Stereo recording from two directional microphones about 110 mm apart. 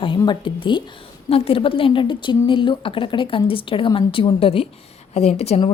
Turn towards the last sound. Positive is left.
turn(degrees=75)  # may be behind; listen again after turning